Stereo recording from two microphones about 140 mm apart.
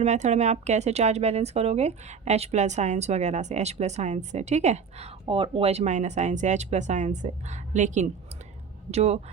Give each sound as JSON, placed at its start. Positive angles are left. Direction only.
{"t": 0.0, "sound": "speech", "side_deg": -55}
{"t": 5.3, "sound": "speech", "side_deg": -40}
{"t": 8.9, "sound": "speech", "side_deg": -50}